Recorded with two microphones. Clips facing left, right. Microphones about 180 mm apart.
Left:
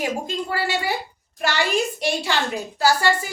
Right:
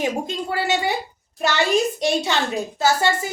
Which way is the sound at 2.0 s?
20° right (ahead or behind).